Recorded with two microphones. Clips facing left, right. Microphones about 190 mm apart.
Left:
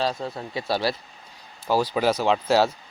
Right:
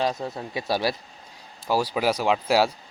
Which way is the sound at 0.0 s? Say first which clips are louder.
Even; 20° right (ahead or behind).